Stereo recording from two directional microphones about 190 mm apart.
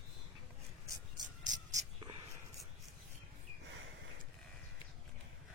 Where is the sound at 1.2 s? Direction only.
40° right (ahead or behind).